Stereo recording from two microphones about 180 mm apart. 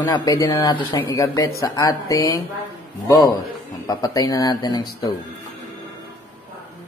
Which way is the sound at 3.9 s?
20° left (ahead or behind).